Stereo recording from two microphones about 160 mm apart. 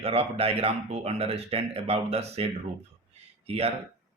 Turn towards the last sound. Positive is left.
turn(degrees=-40)  # may be behind; listen again after turning